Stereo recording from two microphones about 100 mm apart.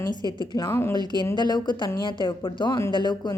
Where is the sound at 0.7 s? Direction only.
25° left (ahead or behind).